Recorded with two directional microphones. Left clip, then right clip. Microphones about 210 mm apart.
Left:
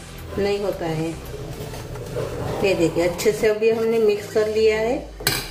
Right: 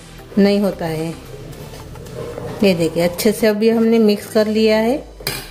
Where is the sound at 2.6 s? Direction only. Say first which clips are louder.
Right 4 dB; 50° right (ahead or behind).